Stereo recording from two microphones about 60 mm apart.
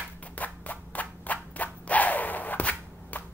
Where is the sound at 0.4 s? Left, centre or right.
Left.